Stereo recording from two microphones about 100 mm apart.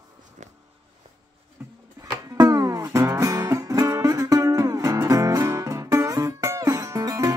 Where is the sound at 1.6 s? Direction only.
20° right (ahead or behind).